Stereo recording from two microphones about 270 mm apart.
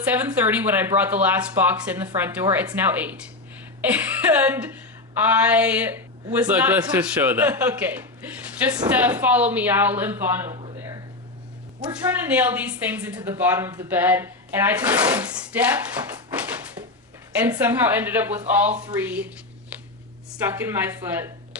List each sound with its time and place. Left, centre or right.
0.1 s a woman's voice: centre
10.5 s a sound: centre
12.0 s a woman's voice: centre
16.3 s a sound: centre
17.3 s a woman's voice: centre
20.4 s speech: centre